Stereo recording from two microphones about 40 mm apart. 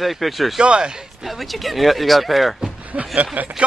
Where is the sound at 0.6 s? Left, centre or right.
Right.